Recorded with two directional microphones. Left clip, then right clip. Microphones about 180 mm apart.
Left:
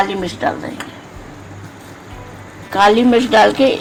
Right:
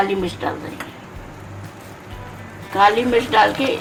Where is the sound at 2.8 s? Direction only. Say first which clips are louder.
Left 3 dB; 55° left (ahead or behind).